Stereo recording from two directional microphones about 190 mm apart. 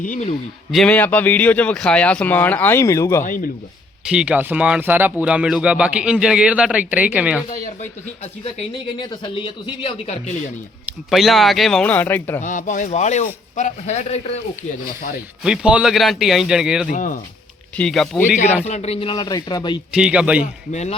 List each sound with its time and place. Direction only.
0.0 s speech: 45° left (ahead or behind)
0.7 s speech: 5° left (ahead or behind)
3.2 s speech: 45° left (ahead or behind)
4.1 s speech: 5° right (ahead or behind)
7.5 s a man's voice: 40° left (ahead or behind)
9.0 s speech: 25° left (ahead or behind)
10.8 s speech: centre (ahead or behind)
12.4 s a man's voice: 40° left (ahead or behind)
14.8 s speech: 45° left (ahead or behind)
15.4 s speech: 5° right (ahead or behind)
16.9 s speech: 45° left (ahead or behind)
17.7 s speech: 5° left (ahead or behind)
18.6 s speech: 35° left (ahead or behind)
19.9 s speech: 5° right (ahead or behind)